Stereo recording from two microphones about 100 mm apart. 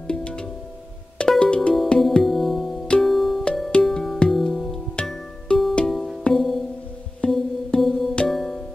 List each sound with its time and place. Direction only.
0.1 s music: 10° left (ahead or behind)
8.1 s music: 10° left (ahead or behind)